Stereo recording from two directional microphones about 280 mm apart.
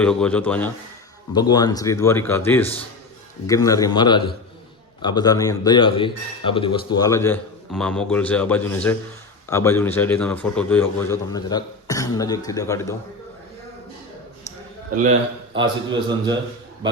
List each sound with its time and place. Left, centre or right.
0.0 s a man's voice: centre
15.5 s a man's voice: centre